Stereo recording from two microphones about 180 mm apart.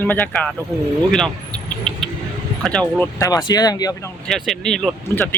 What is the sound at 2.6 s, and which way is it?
Speech, 5° left (ahead or behind).